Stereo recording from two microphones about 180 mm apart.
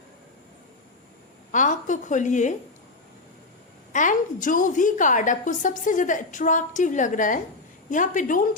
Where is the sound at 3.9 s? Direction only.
45° left (ahead or behind).